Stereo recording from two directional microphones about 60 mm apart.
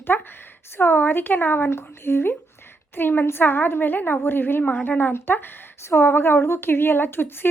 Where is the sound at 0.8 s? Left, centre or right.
Left.